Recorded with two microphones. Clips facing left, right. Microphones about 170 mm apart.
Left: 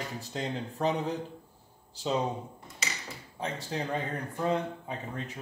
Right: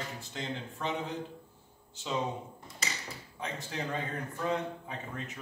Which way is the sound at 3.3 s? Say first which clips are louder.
Left 4 dB; 30° left (ahead or behind).